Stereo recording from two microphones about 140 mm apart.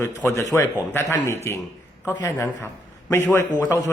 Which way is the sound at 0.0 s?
20° left (ahead or behind).